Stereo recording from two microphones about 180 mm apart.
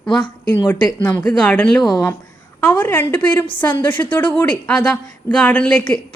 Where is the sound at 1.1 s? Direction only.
5° left (ahead or behind).